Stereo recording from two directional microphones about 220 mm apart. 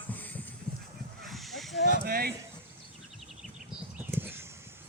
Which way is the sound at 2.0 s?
40° right (ahead or behind).